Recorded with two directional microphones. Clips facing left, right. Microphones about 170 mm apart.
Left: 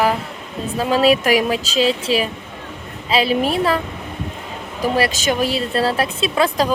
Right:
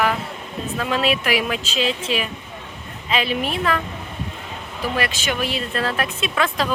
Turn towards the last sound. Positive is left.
turn(degrees=35)  # may be behind; listen again after turning